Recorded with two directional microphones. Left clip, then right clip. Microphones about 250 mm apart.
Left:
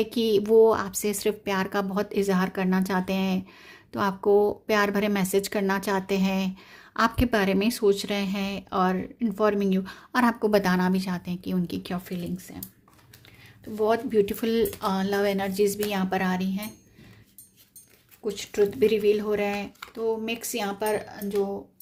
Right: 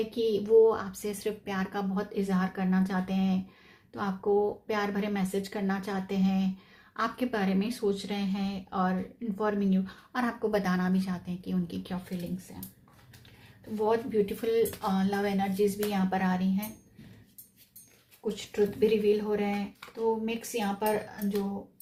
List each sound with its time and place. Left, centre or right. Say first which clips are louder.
0.1 s a woman's voice: left 2 dB; left
13.8 s a woman's voice: left 4 dB; left
18.3 s a woman's voice: left 5 dB; left